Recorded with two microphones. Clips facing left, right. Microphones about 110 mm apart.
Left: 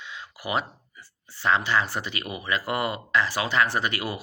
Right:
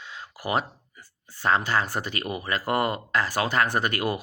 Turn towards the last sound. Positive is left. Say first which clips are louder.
# right 2 dB
turn(degrees=-50)  # may be behind; listen again after turning